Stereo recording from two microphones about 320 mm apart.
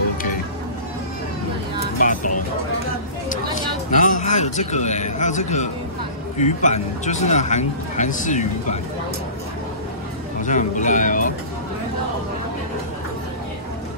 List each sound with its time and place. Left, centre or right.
2.0 s vehicle: left
3.3 s a sound: left
6.3 s a man's voice: left
10.4 s a man's voice: left